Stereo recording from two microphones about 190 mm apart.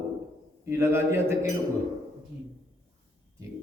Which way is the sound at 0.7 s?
15° right (ahead or behind).